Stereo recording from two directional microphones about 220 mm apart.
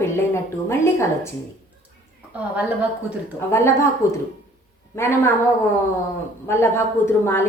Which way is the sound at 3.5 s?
10° left (ahead or behind).